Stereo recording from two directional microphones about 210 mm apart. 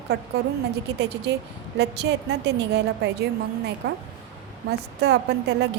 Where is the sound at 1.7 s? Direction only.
50° right (ahead or behind).